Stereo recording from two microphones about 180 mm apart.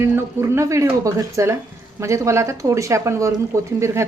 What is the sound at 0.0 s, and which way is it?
Speech, 15° right (ahead or behind).